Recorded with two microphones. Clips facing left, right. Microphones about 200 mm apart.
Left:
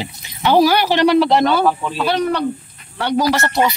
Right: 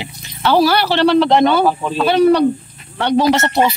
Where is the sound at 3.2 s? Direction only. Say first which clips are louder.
Right 2 dB; 25° right (ahead or behind).